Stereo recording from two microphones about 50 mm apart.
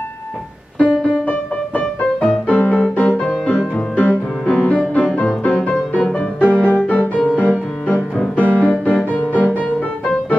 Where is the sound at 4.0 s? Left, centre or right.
Left.